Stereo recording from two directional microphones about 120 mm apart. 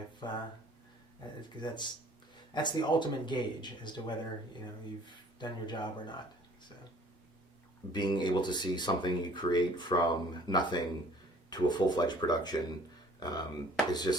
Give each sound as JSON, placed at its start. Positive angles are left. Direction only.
{"t": 0.2, "sound": "speech", "side_deg": 35}
{"t": 1.4, "sound": "speech", "side_deg": 40}
{"t": 5.4, "sound": "speech", "side_deg": 40}
{"t": 7.9, "sound": "speech", "side_deg": 40}